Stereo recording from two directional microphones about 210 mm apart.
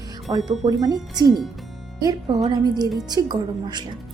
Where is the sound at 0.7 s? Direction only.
20° right (ahead or behind).